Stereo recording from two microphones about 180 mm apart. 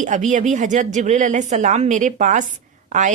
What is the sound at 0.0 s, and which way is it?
Speech, 45° right (ahead or behind).